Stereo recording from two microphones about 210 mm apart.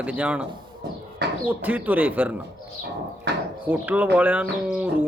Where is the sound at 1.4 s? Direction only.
10° right (ahead or behind).